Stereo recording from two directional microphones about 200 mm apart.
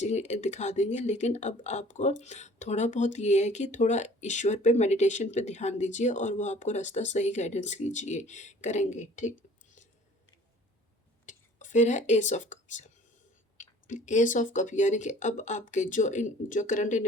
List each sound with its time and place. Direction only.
0.0 s speech: 35° left (ahead or behind)
11.3 s speech: 40° left (ahead or behind)